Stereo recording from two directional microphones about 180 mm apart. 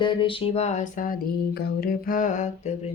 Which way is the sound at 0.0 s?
25° left (ahead or behind).